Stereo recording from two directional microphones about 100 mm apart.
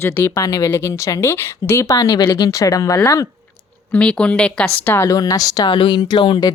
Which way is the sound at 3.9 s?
10° left (ahead or behind).